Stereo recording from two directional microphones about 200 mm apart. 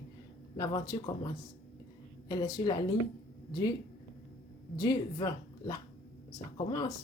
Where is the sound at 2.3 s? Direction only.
20° left (ahead or behind).